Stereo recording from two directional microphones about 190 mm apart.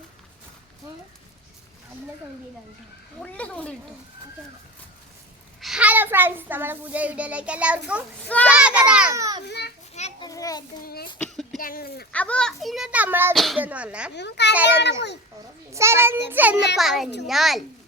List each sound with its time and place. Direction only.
3.2 s speech: 5° left (ahead or behind)
5.5 s a child's voice: centre (ahead or behind)
9.1 s a child's voice: 15° right (ahead or behind)
9.5 s a child's voice: 60° left (ahead or behind)
10.2 s a sound: 20° left (ahead or behind)
10.8 s speech: 50° left (ahead or behind)
11.2 s a sound: centre (ahead or behind)
11.6 s speech: 50° left (ahead or behind)
12.1 s a child's voice: 5° left (ahead or behind); by 13.3 s 10° right (ahead or behind)
13.3 s a child's voice: centre (ahead or behind)
14.1 s a child's voice: 65° left (ahead or behind)
14.5 s a child's voice: 10° right (ahead or behind)